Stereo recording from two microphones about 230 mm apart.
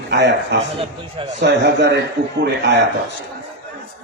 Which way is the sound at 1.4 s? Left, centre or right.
Right.